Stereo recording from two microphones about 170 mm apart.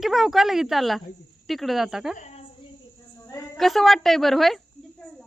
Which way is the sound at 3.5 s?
Centre (ahead or behind).